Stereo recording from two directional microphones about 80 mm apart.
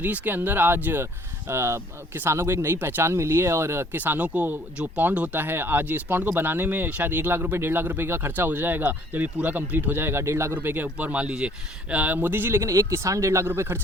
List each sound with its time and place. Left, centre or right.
0.0 s speech: right
12.6 s speech: right